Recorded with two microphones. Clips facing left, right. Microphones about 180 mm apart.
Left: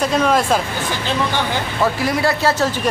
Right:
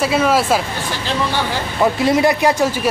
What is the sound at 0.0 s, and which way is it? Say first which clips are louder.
Speech: right 1 dB; 5° right (ahead or behind).